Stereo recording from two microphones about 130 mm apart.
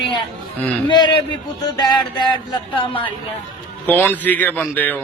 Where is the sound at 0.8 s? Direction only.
35° left (ahead or behind).